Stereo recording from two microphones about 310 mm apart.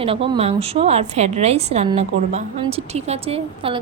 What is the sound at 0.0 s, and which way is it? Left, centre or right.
A woman's voice, centre.